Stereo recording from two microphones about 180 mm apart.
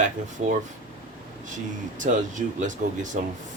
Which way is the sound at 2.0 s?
45° right (ahead or behind).